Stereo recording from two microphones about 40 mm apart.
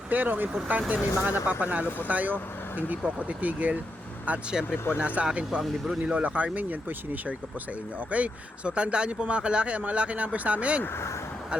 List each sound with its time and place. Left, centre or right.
0.1 s speech: right
4.9 s speech: right
6.0 s speech: right